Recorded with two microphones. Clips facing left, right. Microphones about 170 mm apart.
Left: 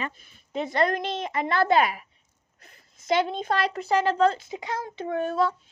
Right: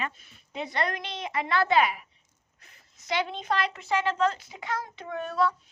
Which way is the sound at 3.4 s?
35° left (ahead or behind).